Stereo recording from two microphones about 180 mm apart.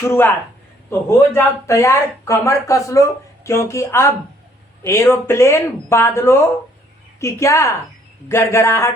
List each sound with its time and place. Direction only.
0.1 s speech: 10° left (ahead or behind)